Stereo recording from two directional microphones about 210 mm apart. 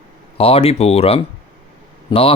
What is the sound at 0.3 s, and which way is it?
Speech, 25° left (ahead or behind).